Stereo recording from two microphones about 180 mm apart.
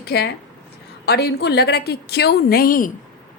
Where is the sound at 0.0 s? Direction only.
65° left (ahead or behind).